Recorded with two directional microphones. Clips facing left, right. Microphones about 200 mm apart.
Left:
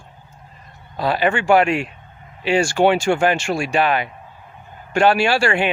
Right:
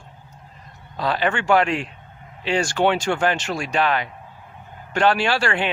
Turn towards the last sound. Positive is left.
turn(degrees=10)  # may be behind; listen again after turning